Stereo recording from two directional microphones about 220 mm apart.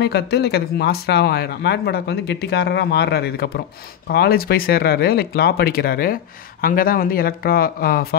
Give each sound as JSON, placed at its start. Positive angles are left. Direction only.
{"t": 0.0, "sound": "speech", "side_deg": 50}